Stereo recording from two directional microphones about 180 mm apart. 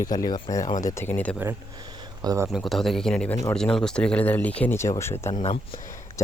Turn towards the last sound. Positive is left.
turn(degrees=35)  # may be behind; listen again after turning